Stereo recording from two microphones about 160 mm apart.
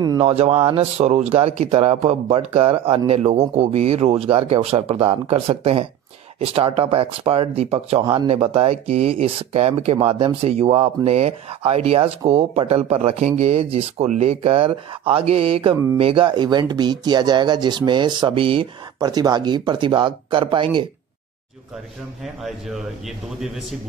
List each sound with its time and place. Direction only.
0.2 s speech: 40° right (ahead or behind)
22.2 s a man's voice: centre (ahead or behind)